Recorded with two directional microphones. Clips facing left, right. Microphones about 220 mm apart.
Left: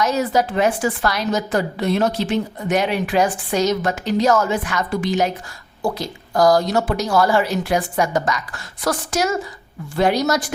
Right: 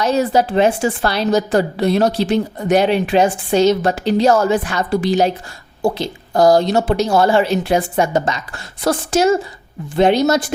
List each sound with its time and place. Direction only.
0.0 s a woman's voice: 30° right (ahead or behind)